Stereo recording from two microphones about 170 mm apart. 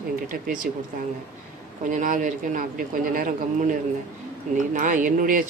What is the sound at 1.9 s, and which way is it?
Speech, 50° right (ahead or behind).